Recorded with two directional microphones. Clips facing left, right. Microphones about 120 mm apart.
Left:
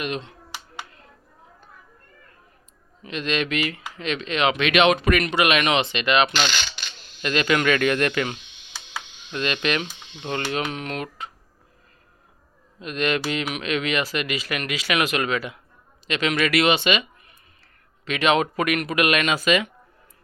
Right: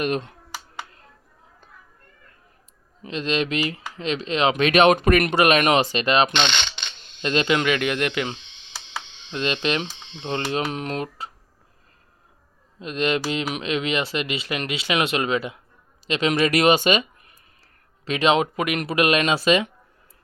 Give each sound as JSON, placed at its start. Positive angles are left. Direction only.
{"t": 0.0, "sound": "speech", "side_deg": -45}
{"t": 3.0, "sound": "speech", "side_deg": -30}
{"t": 8.2, "sound": "a sound", "side_deg": -30}
{"t": 9.0, "sound": "speech", "side_deg": -30}
{"t": 12.8, "sound": "speech", "side_deg": -25}